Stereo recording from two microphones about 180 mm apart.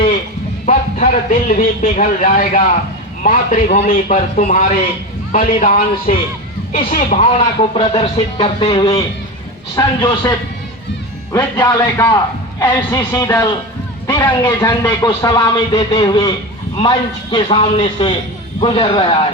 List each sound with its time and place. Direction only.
0.6 s a man's voice: 45° left (ahead or behind)
7.3 s music: 30° left (ahead or behind)
9.7 s speech: 20° left (ahead or behind)
17.3 s speech: 30° left (ahead or behind)